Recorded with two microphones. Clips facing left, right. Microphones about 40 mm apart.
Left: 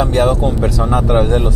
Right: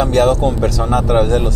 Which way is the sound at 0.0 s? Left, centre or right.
Centre.